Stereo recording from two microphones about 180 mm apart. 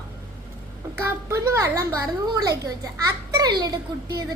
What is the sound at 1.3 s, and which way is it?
A woman's voice, 15° right (ahead or behind).